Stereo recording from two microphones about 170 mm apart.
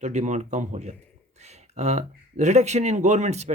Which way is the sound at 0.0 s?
45° right (ahead or behind).